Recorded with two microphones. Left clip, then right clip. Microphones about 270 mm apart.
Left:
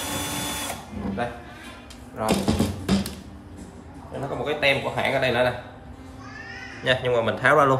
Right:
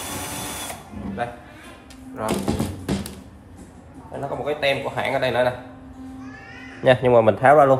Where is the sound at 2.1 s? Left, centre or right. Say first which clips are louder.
Left 1 dB; centre.